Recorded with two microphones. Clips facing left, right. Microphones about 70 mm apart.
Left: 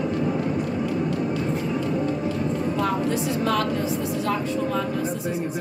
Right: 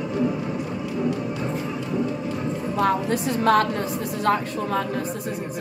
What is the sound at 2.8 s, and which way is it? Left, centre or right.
Speech, right.